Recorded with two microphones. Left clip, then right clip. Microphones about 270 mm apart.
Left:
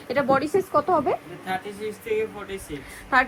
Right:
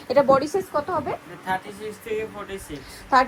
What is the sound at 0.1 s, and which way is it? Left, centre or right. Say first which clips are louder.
Speech: right 4 dB; centre.